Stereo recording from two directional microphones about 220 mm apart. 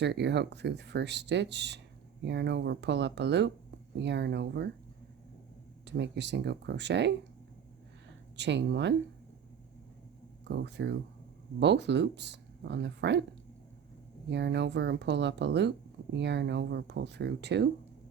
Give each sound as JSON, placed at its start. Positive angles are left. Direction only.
{"t": 0.0, "sound": "speech", "side_deg": -50}
{"t": 5.8, "sound": "speech", "side_deg": -50}
{"t": 8.4, "sound": "speech", "side_deg": -50}
{"t": 10.5, "sound": "speech", "side_deg": -50}
{"t": 14.3, "sound": "speech", "side_deg": -50}